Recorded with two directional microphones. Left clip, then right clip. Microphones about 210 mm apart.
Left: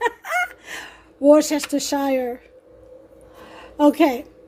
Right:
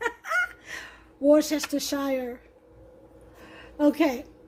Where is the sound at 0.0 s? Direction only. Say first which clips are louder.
Left 5 dB; 20° left (ahead or behind).